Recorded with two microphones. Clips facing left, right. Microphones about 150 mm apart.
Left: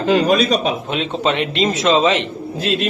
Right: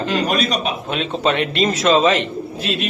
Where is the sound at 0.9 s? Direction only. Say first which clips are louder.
Even; 20° left (ahead or behind).